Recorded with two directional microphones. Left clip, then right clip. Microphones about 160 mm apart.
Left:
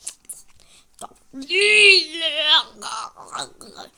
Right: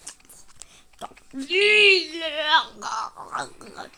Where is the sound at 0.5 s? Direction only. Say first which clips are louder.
Right 1 dB; 20° left (ahead or behind); by 3.1 s 5° left (ahead or behind).